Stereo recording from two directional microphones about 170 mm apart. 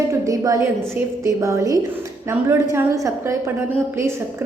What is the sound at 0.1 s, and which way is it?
A woman's voice, 20° right (ahead or behind).